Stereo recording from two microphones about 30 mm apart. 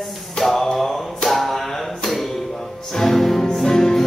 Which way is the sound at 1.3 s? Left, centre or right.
Centre.